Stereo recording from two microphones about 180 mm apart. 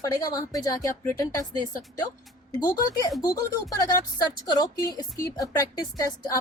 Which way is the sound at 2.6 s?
20° left (ahead or behind).